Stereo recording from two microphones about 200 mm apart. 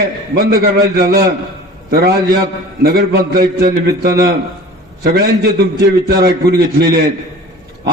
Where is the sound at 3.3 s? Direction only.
50° right (ahead or behind).